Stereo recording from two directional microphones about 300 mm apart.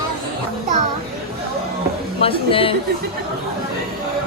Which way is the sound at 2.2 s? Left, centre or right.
Centre.